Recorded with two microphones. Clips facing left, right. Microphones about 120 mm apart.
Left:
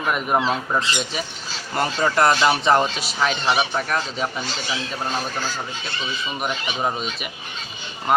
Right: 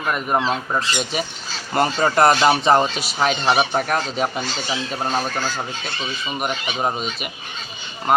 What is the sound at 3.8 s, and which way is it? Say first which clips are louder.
Speech: right 3 dB; 65° right (ahead or behind).